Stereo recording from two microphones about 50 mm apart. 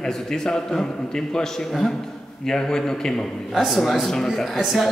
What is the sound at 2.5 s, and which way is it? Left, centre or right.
Speech, centre.